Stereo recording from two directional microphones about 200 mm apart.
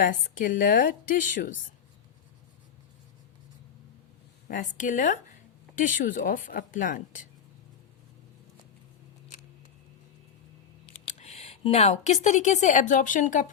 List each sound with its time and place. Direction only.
0.0 s a woman's voice: 40° left (ahead or behind)
4.4 s speech: 40° left (ahead or behind)
11.2 s speech: 30° left (ahead or behind)